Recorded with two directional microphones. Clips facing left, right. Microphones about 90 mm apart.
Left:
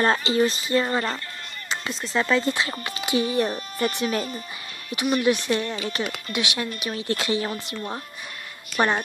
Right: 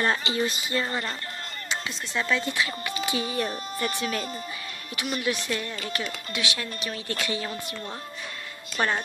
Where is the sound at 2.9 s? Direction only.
20° left (ahead or behind).